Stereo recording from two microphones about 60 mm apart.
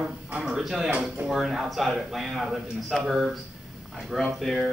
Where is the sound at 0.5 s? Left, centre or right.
Centre.